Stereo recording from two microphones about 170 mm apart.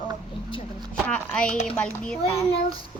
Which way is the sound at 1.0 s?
5° left (ahead or behind).